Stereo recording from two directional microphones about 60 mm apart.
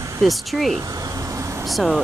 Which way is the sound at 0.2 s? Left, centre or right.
Centre.